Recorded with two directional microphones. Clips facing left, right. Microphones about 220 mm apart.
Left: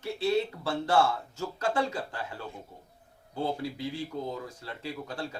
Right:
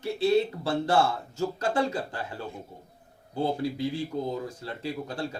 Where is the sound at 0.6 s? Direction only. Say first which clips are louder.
Right 2 dB; 35° right (ahead or behind).